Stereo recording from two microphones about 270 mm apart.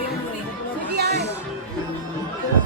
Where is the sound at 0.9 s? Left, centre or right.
Right.